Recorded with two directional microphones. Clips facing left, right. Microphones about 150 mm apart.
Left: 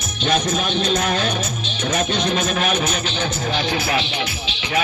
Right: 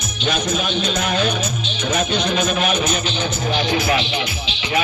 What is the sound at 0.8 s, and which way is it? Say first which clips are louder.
Speech: left 1 dB; 40° left (ahead or behind).